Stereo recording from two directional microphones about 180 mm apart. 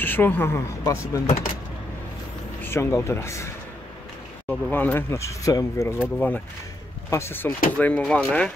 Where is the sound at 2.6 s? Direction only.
15° left (ahead or behind).